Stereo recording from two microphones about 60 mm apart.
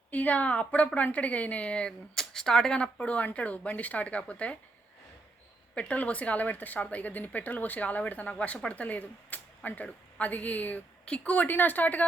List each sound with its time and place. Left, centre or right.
0.1 s a woman's voice: left
2.1 s a woman's voice: centre
5.7 s a woman's voice: left